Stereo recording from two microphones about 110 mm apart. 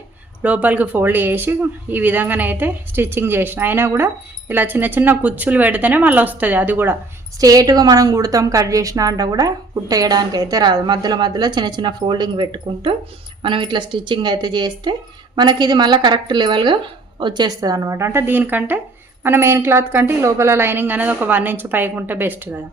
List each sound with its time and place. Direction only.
0.4 s speech: 15° right (ahead or behind)
7.3 s a woman's voice: 35° right (ahead or behind); by 22.6 s 15° right (ahead or behind)